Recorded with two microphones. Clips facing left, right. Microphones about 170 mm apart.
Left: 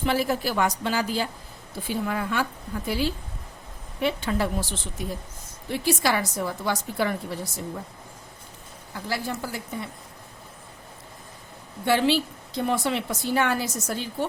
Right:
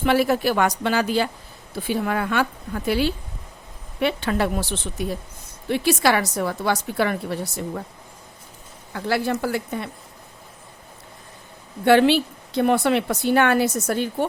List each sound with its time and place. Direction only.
0.0 s a woman's voice: 70° right (ahead or behind)
8.9 s a woman's voice: 70° right (ahead or behind)
11.9 s a woman's voice: 65° right (ahead or behind)